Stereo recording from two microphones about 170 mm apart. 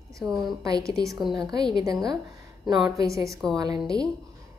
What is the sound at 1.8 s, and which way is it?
A woman's voice, 20° right (ahead or behind).